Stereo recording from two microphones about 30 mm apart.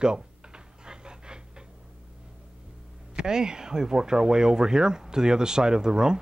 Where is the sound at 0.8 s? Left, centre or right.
Right.